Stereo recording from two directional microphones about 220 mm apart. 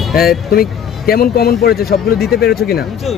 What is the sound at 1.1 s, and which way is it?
Speech, 45° left (ahead or behind).